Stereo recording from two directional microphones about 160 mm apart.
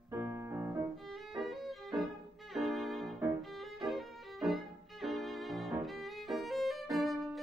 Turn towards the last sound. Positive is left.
turn(degrees=0)  # may be behind; listen again after turning